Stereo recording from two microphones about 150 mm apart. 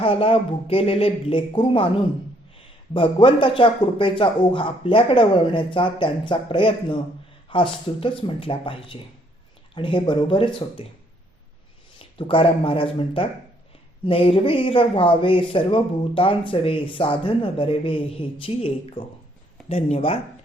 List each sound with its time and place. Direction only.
0.0 s speech: 40° left (ahead or behind)
2.9 s speech: 35° left (ahead or behind)
11.9 s speech: 35° left (ahead or behind)